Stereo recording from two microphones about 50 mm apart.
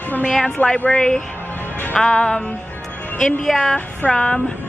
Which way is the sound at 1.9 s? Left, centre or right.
Centre.